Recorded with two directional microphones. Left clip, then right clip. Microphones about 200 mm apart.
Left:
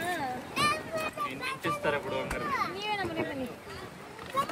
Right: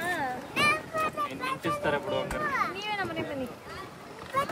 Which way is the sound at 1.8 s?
50° right (ahead or behind).